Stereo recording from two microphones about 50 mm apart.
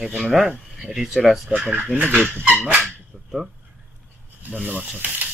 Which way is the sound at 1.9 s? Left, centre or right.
Right.